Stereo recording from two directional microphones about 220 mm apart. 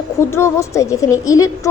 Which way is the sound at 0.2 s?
10° left (ahead or behind).